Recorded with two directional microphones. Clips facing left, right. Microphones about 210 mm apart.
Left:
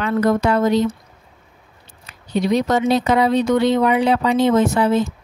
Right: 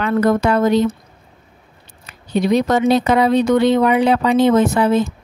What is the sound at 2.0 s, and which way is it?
Speech, 55° right (ahead or behind).